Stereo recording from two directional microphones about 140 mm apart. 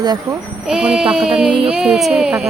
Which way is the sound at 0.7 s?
5° right (ahead or behind).